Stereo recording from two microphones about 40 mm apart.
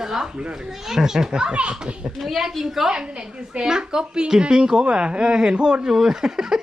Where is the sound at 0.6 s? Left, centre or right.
Centre.